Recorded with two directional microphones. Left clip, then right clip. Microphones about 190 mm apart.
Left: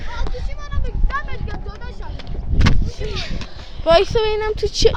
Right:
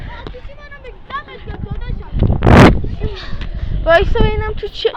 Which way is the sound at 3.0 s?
5° left (ahead or behind).